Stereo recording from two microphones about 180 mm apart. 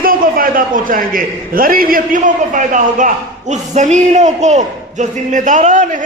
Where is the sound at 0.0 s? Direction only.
50° right (ahead or behind).